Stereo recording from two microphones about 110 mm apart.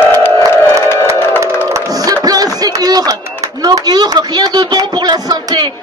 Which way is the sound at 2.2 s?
35° right (ahead or behind).